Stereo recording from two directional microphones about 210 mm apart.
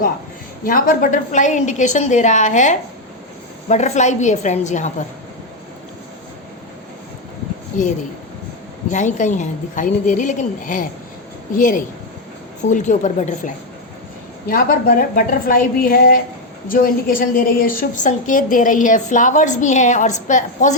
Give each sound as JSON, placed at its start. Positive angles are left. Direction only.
{"t": 0.6, "sound": "a woman's voice", "side_deg": 40}
{"t": 8.9, "sound": "a woman's voice", "side_deg": 35}